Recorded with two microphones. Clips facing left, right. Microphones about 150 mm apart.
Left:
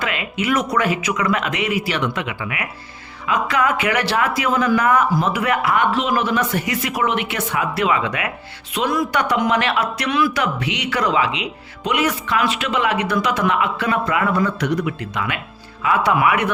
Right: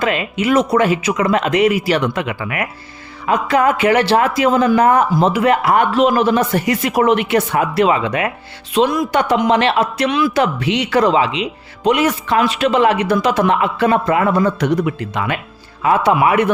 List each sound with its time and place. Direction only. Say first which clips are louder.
0.0 s speech: right 6 dB; 35° right (ahead or behind)
3.2 s a man's voice: right 5 dB; 30° right (ahead or behind)